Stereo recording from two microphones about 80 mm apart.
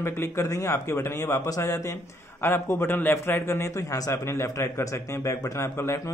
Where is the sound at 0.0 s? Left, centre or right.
Left.